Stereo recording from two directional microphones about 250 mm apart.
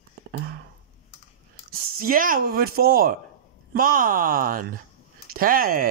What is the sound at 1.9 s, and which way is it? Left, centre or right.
Speech, right.